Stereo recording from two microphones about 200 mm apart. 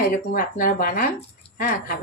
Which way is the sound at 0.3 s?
45° left (ahead or behind).